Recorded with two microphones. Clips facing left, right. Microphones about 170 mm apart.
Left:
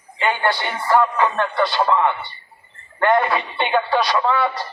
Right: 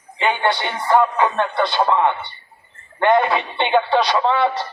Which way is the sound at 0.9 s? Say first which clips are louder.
Right 1 dB; 20° right (ahead or behind).